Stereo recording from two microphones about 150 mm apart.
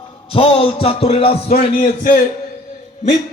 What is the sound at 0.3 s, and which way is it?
Music, 40° left (ahead or behind).